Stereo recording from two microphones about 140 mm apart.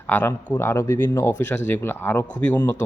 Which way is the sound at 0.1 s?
15° left (ahead or behind).